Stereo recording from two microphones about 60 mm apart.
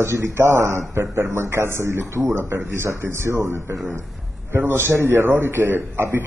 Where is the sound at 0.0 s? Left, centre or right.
Right.